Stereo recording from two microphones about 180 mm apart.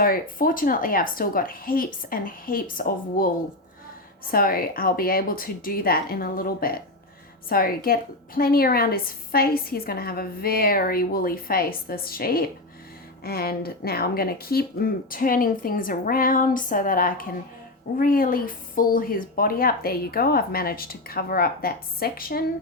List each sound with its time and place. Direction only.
0.0 s speech: 50° left (ahead or behind)
4.3 s speech: 55° left (ahead or behind)